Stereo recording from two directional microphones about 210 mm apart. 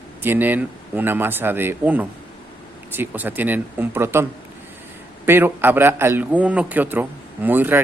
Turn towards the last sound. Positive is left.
turn(degrees=-10)  # may be behind; listen again after turning